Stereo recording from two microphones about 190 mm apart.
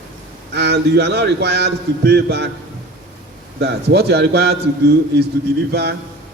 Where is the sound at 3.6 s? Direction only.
60° right (ahead or behind).